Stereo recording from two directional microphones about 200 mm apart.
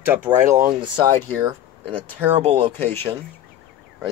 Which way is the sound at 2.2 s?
30° right (ahead or behind).